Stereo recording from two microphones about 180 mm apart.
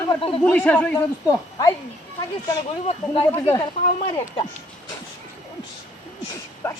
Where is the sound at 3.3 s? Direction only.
15° left (ahead or behind).